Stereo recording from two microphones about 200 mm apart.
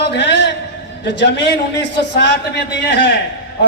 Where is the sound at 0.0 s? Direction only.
60° left (ahead or behind).